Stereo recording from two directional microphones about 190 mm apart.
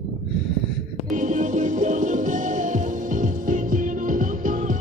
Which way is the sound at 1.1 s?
40° right (ahead or behind).